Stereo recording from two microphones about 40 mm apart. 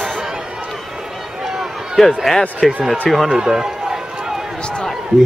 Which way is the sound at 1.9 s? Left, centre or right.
Centre.